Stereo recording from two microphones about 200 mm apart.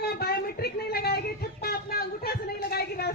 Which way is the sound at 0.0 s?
50° left (ahead or behind).